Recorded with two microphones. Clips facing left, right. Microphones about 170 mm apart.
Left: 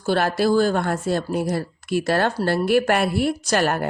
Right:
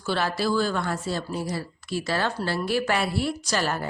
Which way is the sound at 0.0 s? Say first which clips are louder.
Left 6 dB; 50° left (ahead or behind).